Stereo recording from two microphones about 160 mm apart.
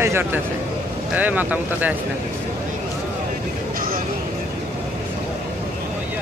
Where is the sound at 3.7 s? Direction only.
65° right (ahead or behind).